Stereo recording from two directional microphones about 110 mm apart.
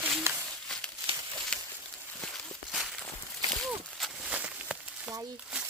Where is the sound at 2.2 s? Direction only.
Centre (ahead or behind).